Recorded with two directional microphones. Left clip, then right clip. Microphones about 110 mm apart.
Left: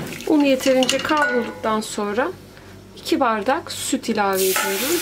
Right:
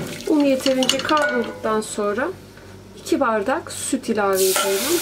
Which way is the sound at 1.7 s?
50° left (ahead or behind).